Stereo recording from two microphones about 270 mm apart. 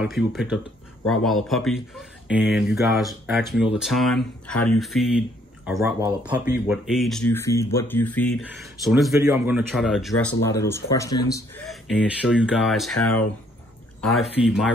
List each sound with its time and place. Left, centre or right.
0.0 s speech: centre
5.8 s speech: centre
9.1 s speech: centre
11.6 s speech: centre
12.9 s speech: left
14.0 s speech: centre